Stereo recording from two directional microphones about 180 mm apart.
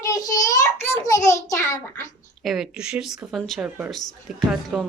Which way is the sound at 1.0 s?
20° left (ahead or behind).